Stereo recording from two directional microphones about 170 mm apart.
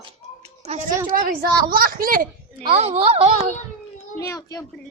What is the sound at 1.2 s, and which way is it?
A woman's voice, 60° right (ahead or behind).